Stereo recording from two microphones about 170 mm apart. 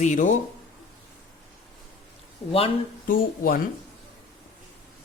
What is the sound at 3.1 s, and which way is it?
Speech, 55° left (ahead or behind).